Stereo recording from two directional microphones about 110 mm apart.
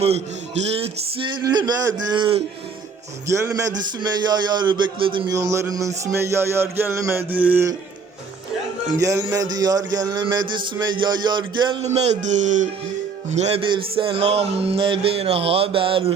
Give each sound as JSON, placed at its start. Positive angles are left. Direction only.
{"t": 0.7, "sound": "speech", "side_deg": -60}
{"t": 1.3, "sound": "a man's voice", "side_deg": -40}
{"t": 3.2, "sound": "a man's voice", "side_deg": -25}
{"t": 5.3, "sound": "music", "side_deg": -30}
{"t": 9.0, "sound": "a man's voice", "side_deg": -30}
{"t": 10.3, "sound": "a sound", "side_deg": -40}
{"t": 11.8, "sound": "speech", "side_deg": -80}
{"t": 13.6, "sound": "speech", "side_deg": -55}